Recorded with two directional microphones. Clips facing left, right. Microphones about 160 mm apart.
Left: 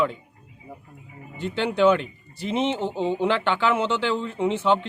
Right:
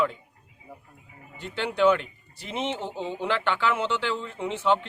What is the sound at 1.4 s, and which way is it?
Speech, 25° left (ahead or behind).